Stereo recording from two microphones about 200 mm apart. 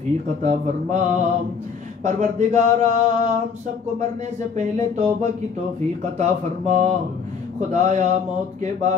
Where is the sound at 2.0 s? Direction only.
35° right (ahead or behind).